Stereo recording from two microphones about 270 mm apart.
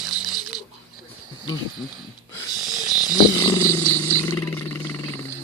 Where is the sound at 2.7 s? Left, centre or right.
Right.